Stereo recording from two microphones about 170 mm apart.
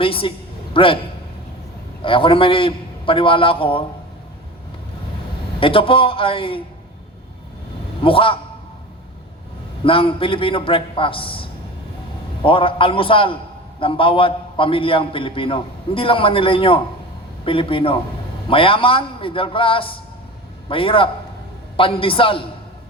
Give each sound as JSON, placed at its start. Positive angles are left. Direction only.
{"t": 0.0, "sound": "a woman's voice", "side_deg": 30}
{"t": 2.0, "sound": "a man's voice", "side_deg": 30}
{"t": 5.5, "sound": "a man's voice", "side_deg": 30}
{"t": 8.0, "sound": "a man's voice", "side_deg": 30}
{"t": 9.8, "sound": "a man's voice", "side_deg": 30}